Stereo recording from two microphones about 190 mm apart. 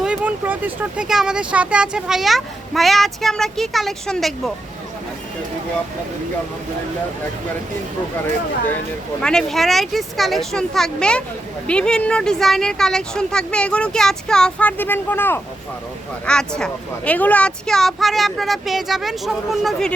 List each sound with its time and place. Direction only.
0.0 s speech: 5° right (ahead or behind)
9.2 s speech: centre (ahead or behind)